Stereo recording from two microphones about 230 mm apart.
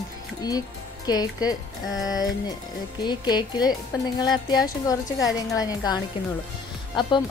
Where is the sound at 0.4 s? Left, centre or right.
Centre.